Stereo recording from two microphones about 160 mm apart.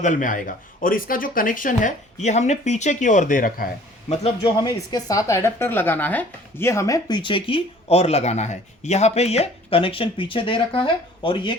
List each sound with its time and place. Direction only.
0.0 s speech: 55° left (ahead or behind)
4.6 s speech: 25° left (ahead or behind)